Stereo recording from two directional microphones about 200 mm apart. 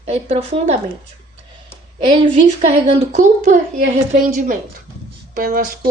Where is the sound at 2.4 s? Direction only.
35° right (ahead or behind).